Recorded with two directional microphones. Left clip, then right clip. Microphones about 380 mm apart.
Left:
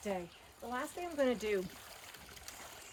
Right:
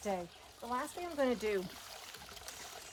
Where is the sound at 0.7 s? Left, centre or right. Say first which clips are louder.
Right 1 dB; centre.